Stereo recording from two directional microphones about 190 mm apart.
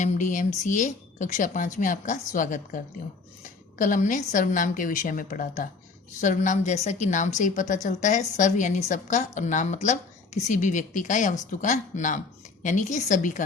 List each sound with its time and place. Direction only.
0.0 s a woman's voice: 40° left (ahead or behind)